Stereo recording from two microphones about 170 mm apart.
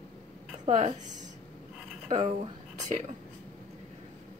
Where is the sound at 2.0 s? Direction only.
35° right (ahead or behind).